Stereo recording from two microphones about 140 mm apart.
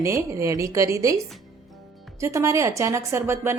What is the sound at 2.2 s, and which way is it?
Speech, 20° right (ahead or behind).